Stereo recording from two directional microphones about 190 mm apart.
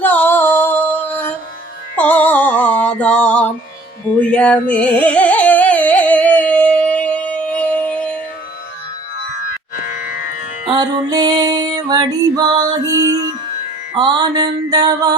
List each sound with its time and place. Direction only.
0.0 s music: 10° left (ahead or behind)
4.2 s a sound: 5° left (ahead or behind)
10.1 s music: 50° left (ahead or behind)
10.7 s music: 20° right (ahead or behind)